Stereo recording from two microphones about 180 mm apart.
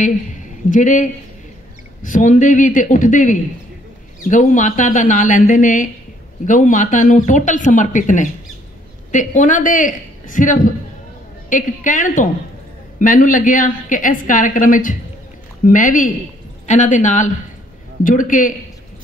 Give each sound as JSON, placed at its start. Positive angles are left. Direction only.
{"t": 0.7, "sound": "a woman's voice", "side_deg": 45}
{"t": 2.0, "sound": "a woman's voice", "side_deg": 45}